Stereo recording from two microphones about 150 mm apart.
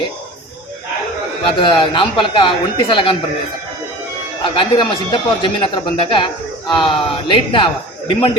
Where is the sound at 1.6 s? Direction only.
35° left (ahead or behind).